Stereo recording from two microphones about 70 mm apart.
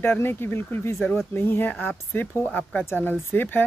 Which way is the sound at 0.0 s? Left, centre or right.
Left.